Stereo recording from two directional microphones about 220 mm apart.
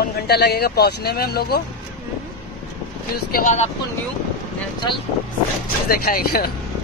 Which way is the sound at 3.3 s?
40° left (ahead or behind).